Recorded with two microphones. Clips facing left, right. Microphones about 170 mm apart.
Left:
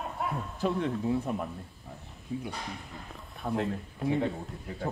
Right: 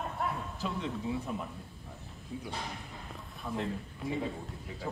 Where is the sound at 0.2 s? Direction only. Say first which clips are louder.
Left 1 dB; centre (ahead or behind).